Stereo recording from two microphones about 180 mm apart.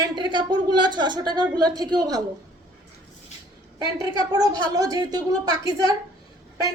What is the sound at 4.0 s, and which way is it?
A woman's voice, 20° right (ahead or behind).